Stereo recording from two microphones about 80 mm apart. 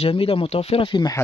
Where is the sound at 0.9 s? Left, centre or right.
Left.